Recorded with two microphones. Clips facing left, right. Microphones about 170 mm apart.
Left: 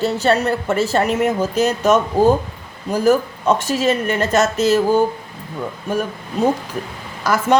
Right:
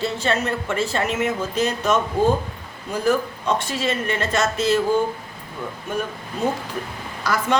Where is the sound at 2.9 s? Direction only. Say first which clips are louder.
Left 5 dB; 40° left (ahead or behind).